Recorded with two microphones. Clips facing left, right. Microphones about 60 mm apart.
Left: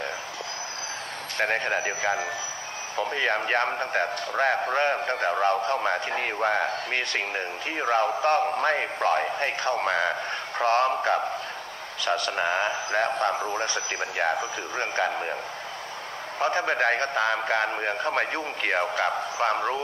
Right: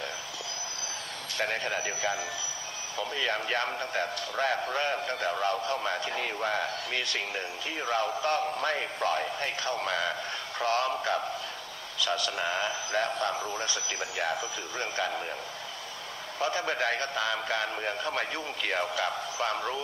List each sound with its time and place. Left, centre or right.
1.4 s a man's voice: left
16.4 s a man's voice: left